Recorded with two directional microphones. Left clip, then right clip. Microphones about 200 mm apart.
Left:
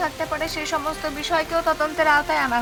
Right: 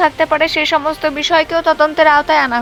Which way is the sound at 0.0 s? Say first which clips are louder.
Right 12 dB; 30° right (ahead or behind).